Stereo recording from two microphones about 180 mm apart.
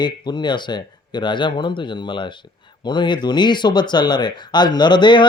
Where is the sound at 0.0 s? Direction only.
25° left (ahead or behind).